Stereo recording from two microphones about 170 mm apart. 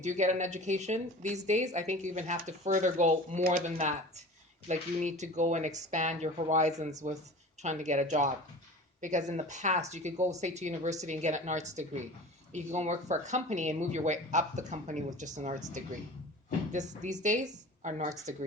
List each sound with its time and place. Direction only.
0.0 s speech: 45° right (ahead or behind)
16.7 s a woman's voice: 45° right (ahead or behind)